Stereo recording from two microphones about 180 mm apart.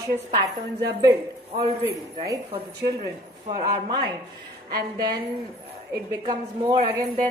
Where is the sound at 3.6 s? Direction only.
25° right (ahead or behind).